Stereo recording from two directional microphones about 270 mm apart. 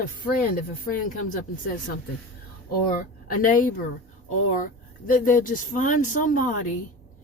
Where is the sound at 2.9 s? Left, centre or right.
Left.